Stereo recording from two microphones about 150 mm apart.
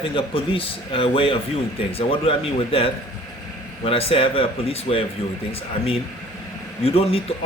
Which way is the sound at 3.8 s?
40° left (ahead or behind).